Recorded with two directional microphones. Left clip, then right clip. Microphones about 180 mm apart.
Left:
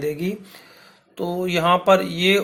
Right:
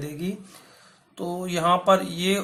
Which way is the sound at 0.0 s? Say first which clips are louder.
Left 8 dB; 15° left (ahead or behind).